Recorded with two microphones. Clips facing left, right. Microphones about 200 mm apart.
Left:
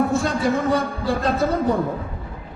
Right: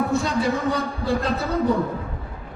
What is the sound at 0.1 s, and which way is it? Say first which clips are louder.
A man's voice: left 1 dB; 55° left (ahead or behind).